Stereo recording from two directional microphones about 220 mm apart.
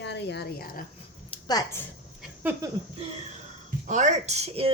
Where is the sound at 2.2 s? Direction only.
10° right (ahead or behind).